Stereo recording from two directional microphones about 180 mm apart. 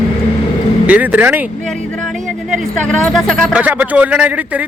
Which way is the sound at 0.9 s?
10° right (ahead or behind).